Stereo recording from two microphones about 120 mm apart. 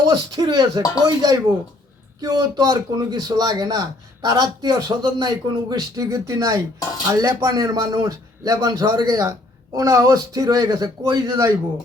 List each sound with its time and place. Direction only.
0.1 s speech: 35° right (ahead or behind)
0.8 s speech: 30° left (ahead or behind)
1.0 s speech: 30° right (ahead or behind)